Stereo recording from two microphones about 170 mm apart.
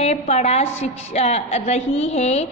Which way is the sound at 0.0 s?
40° left (ahead or behind).